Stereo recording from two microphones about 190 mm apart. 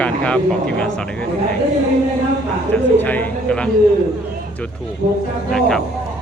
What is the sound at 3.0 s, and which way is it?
Speech, 10° left (ahead or behind).